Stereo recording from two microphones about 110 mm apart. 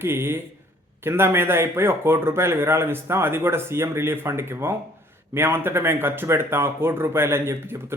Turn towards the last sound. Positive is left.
turn(degrees=-20)  # may be behind; listen again after turning